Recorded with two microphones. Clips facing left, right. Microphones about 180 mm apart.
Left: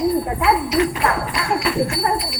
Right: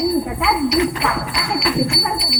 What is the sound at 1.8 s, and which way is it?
Speech, 55° left (ahead or behind).